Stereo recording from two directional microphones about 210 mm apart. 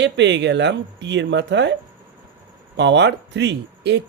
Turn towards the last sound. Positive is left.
turn(degrees=-55)  # may be behind; listen again after turning